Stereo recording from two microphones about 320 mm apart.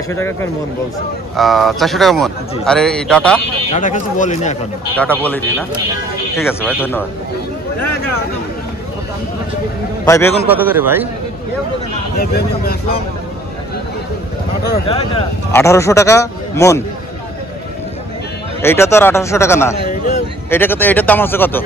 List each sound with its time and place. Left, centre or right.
0.1 s a man's voice: centre
3.7 s speech: left
4.9 s a man's voice: centre
10.0 s a man's voice: centre
10.4 s speech: centre
12.2 s speech: left
14.9 s a man's voice: centre
18.6 s a man's voice: centre